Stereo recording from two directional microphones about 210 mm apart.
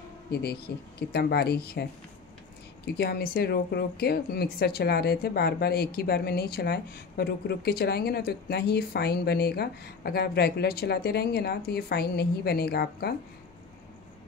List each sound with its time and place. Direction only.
0.3 s speech: 50° left (ahead or behind)